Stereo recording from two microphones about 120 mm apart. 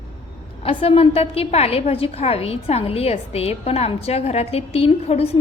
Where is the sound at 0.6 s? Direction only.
50° left (ahead or behind).